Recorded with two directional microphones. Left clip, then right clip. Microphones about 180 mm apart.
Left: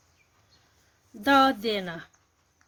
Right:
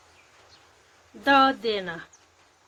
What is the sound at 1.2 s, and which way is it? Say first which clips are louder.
Speech: right 2 dB; 45° left (ahead or behind).